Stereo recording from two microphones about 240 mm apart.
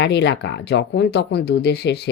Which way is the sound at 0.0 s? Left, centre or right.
Left.